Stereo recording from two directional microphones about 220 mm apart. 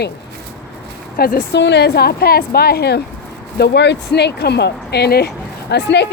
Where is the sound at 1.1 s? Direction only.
45° left (ahead or behind).